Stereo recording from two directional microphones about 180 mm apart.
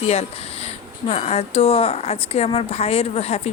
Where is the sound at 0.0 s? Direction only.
35° left (ahead or behind).